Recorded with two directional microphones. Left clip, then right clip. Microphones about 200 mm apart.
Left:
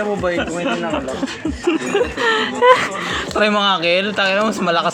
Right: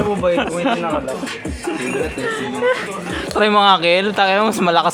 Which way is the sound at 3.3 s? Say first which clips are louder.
Right 4 dB; 10° right (ahead or behind).